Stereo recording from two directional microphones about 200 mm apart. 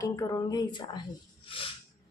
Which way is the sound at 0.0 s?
20° left (ahead or behind).